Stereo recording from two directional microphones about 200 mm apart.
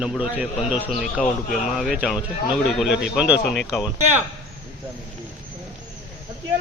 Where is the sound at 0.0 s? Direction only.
5° right (ahead or behind).